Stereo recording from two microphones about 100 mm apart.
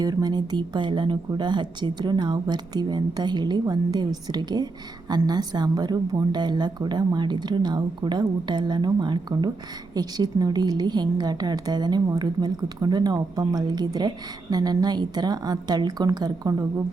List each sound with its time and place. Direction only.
0.0 s a woman's voice: 40° right (ahead or behind)